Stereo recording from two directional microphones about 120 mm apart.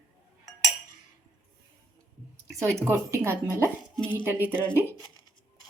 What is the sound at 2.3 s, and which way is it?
Speech, 25° right (ahead or behind).